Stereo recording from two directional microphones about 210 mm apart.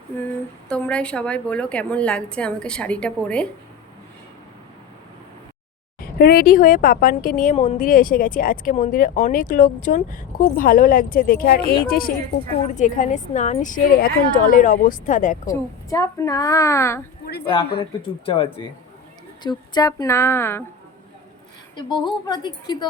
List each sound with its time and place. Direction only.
0.7 s a woman's voice: 5° left (ahead or behind)
6.1 s speech: 45° left (ahead or behind)
7.5 s speech: 30° left (ahead or behind)
7.8 s speech: 40° left (ahead or behind)
15.4 s a woman's voice: 15° left (ahead or behind)
18.3 s a woman's voice: 25° left (ahead or behind)
21.8 s speech: 20° left (ahead or behind)